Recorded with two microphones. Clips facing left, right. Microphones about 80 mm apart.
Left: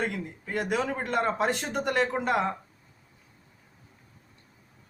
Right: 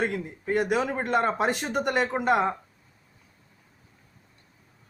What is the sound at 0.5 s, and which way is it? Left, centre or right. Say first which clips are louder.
Speech: right 4 dB; centre.